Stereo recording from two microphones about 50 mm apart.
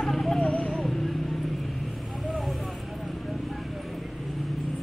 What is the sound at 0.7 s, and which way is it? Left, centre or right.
Vehicle, centre.